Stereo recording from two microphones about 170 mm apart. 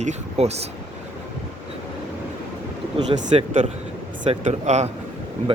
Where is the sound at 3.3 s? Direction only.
35° right (ahead or behind).